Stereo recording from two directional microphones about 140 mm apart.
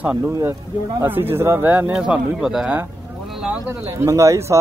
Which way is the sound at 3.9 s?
20° right (ahead or behind).